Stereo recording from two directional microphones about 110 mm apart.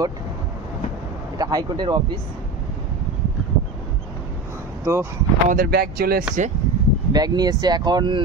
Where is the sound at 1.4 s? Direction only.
35° right (ahead or behind).